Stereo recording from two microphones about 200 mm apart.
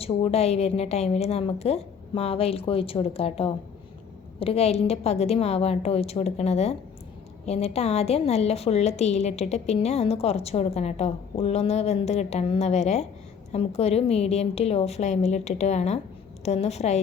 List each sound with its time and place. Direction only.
0.0 s a woman's voice: 30° left (ahead or behind)